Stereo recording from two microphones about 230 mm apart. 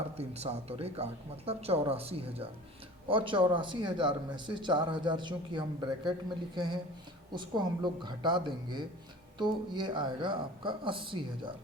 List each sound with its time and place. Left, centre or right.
0.2 s speech: right